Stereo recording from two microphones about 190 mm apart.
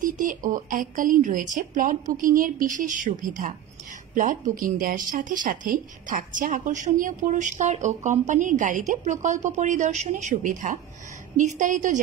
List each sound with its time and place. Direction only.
0.0 s a woman's voice: 45° right (ahead or behind)